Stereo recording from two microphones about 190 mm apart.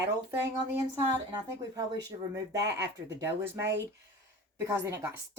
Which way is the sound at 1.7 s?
20° right (ahead or behind).